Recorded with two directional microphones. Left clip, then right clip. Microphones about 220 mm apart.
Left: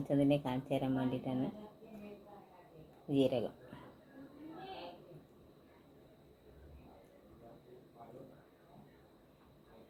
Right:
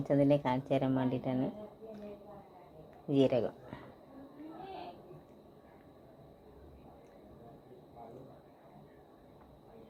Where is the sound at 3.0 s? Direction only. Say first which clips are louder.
Right 4 dB; 20° right (ahead or behind).